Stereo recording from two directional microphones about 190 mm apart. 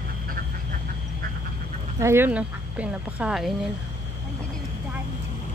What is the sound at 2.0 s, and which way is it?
Speech, 10° right (ahead or behind).